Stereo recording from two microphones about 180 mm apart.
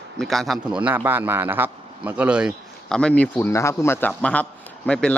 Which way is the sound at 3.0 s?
5° left (ahead or behind).